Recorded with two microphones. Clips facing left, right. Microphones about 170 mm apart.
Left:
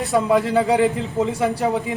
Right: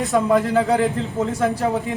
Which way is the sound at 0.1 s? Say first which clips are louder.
Left 1 dB; 10° left (ahead or behind).